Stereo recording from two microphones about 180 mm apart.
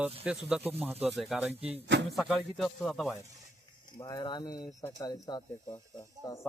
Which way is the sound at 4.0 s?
25° left (ahead or behind).